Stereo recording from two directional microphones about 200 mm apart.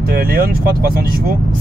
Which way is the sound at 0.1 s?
50° right (ahead or behind).